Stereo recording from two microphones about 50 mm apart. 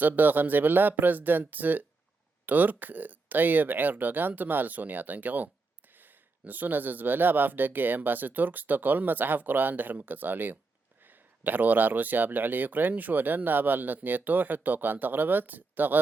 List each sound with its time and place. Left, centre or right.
0.0 s speech: right